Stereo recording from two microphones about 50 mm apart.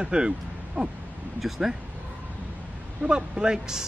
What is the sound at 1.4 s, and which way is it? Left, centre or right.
Speech, centre.